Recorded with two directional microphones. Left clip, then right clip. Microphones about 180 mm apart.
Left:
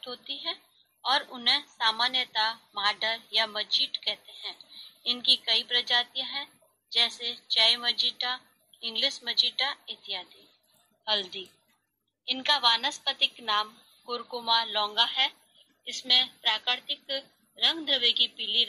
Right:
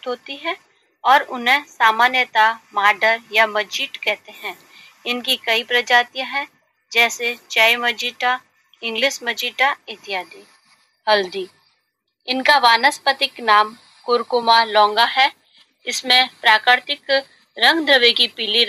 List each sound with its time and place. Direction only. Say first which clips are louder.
0.0 s speech: right 10 dB; 40° right (ahead or behind)
11.1 s speech: right 12 dB; 55° right (ahead or behind)
12.4 s a woman's voice: right 11 dB; 55° right (ahead or behind)